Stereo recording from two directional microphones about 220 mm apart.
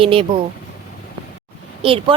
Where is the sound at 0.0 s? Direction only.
25° right (ahead or behind).